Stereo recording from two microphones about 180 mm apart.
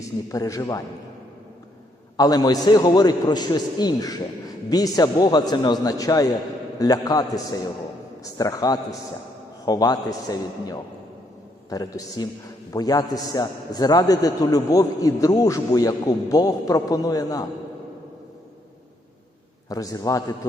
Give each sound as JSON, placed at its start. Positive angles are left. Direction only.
{"t": 0.0, "sound": "a man's voice", "side_deg": 20}
{"t": 2.1, "sound": "a man's voice", "side_deg": 20}
{"t": 19.6, "sound": "a man's voice", "side_deg": 20}